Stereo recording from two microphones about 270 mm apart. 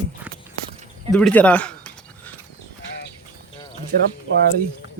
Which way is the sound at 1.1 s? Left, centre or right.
Centre.